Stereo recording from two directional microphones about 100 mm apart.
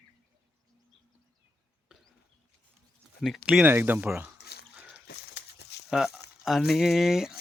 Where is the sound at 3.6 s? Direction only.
20° right (ahead or behind).